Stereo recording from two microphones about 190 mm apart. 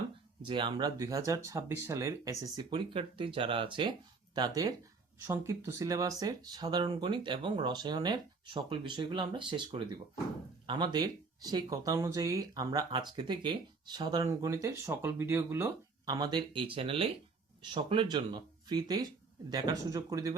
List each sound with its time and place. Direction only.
0.4 s speech: 25° right (ahead or behind)